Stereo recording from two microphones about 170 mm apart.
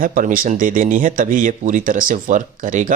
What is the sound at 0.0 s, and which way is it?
Speech, 50° right (ahead or behind).